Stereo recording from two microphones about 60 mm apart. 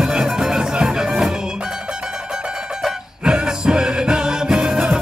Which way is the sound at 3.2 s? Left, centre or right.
Centre.